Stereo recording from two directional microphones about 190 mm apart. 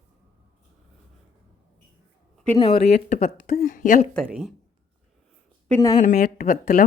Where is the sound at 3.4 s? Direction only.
45° left (ahead or behind).